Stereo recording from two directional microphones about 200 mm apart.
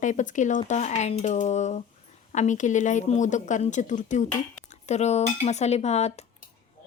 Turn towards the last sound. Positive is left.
turn(degrees=35)  # may be behind; listen again after turning